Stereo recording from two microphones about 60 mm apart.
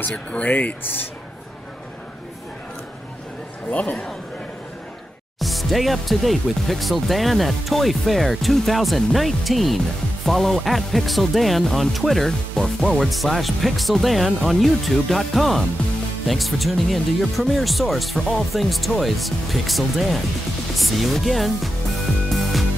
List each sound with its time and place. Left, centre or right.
0.1 s speech: left
5.4 s speech: centre
13.1 s speech: centre